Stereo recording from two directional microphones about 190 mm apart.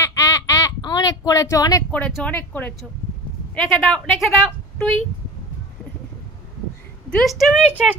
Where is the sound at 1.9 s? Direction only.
5° left (ahead or behind).